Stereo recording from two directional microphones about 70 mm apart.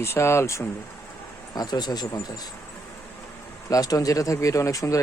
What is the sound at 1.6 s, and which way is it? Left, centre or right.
Speech, left.